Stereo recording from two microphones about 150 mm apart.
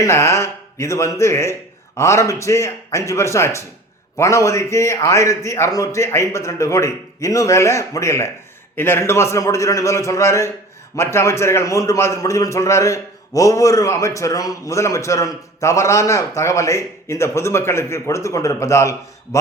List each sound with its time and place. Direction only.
0.0 s a man's voice: 20° left (ahead or behind)